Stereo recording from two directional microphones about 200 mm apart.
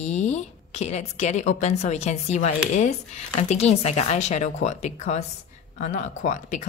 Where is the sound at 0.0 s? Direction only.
35° left (ahead or behind).